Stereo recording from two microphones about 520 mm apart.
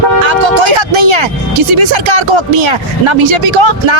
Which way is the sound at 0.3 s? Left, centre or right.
Right.